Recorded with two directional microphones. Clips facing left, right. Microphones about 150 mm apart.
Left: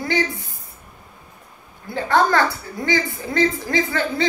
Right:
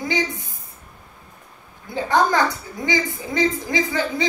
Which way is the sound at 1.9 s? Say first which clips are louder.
Left 1 dB; 15° right (ahead or behind).